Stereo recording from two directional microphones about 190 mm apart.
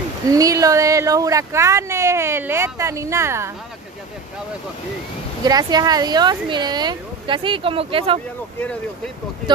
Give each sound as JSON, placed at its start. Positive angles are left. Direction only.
{"t": 0.3, "sound": "speech", "side_deg": -20}
{"t": 5.4, "sound": "speech", "side_deg": -20}
{"t": 8.5, "sound": "speech", "side_deg": 5}